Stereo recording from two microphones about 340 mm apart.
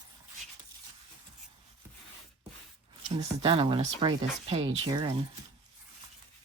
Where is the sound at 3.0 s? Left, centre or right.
Centre.